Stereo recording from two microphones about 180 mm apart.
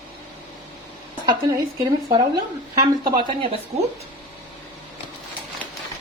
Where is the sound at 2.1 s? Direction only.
25° right (ahead or behind).